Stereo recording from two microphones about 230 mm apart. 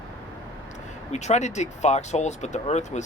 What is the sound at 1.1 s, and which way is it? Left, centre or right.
Speech, left.